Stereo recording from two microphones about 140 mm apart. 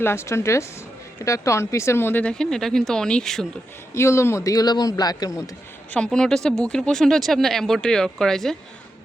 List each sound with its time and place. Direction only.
0.0 s a man's voice: 20° left (ahead or behind)
3.9 s a man's voice: 20° left (ahead or behind)
5.9 s speech: 5° left (ahead or behind)